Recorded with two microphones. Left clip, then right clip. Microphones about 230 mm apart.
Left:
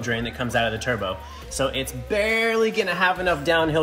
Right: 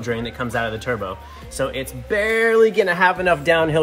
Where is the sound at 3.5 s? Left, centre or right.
Right.